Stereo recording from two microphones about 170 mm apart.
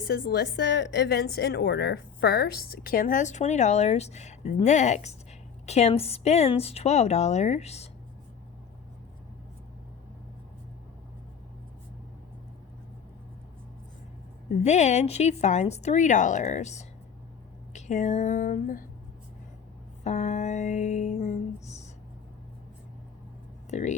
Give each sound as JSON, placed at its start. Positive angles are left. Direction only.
{"t": 0.1, "sound": "a woman's voice", "side_deg": 75}
{"t": 14.5, "sound": "a woman's voice", "side_deg": 40}
{"t": 20.1, "sound": "a woman's voice", "side_deg": 40}
{"t": 23.7, "sound": "a woman's voice", "side_deg": 40}